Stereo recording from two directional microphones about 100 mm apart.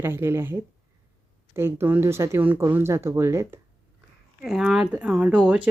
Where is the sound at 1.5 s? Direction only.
25° right (ahead or behind).